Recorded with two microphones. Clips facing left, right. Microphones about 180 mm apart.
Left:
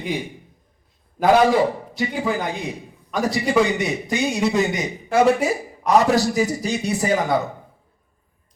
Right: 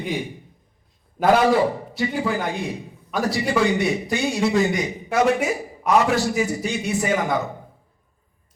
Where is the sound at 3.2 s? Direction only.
20° left (ahead or behind).